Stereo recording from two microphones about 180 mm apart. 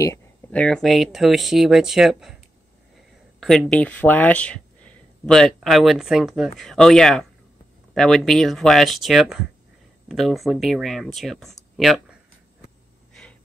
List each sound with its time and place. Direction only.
0.0 s a sound: 15° left (ahead or behind)
0.6 s speech: 5° left (ahead or behind)
3.3 s speech: centre (ahead or behind)